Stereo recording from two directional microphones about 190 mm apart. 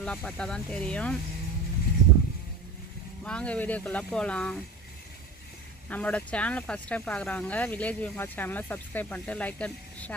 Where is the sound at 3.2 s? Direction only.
5° left (ahead or behind).